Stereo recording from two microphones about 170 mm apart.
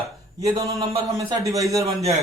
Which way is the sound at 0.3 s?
20° right (ahead or behind).